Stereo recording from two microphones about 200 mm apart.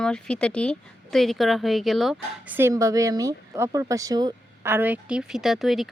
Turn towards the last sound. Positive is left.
turn(degrees=0)  # may be behind; listen again after turning